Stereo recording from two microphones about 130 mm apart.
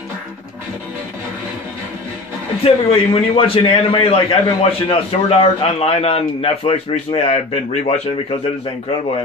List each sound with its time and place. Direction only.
2.6 s a man's voice: 45° left (ahead or behind)